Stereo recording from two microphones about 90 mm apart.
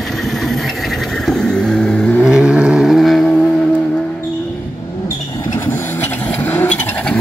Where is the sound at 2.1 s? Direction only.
5° right (ahead or behind).